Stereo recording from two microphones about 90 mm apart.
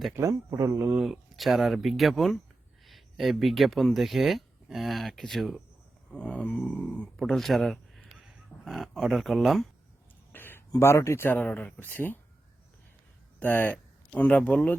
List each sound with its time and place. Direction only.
0.2 s speech: 35° right (ahead or behind)
1.0 s speech: centre (ahead or behind)
6.1 s a sound: 10° left (ahead or behind)
6.6 s speech: 10° left (ahead or behind)
10.3 s a sound: 25° left (ahead or behind)
10.8 s speech: 30° left (ahead or behind)
11.3 s speech: 20° left (ahead or behind)
13.4 s speech: 20° left (ahead or behind)